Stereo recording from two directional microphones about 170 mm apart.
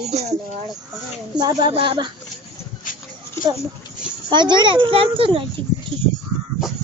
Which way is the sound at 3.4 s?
15° left (ahead or behind).